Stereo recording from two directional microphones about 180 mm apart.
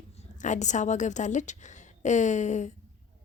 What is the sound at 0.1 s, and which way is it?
A woman's voice, 40° left (ahead or behind).